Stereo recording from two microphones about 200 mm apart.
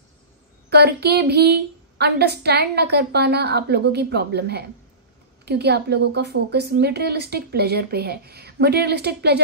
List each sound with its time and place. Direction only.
0.7 s a woman's voice: 55° right (ahead or behind)